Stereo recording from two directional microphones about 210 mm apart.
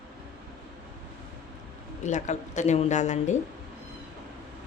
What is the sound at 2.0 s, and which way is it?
A woman's voice, 35° left (ahead or behind).